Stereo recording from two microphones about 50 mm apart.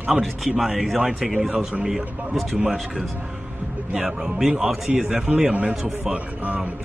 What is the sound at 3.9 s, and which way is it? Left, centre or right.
Speech, centre.